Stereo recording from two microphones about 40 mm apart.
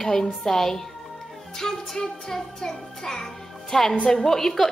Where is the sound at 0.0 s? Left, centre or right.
Centre.